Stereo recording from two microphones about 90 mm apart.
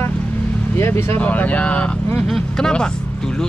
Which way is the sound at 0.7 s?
30° left (ahead or behind).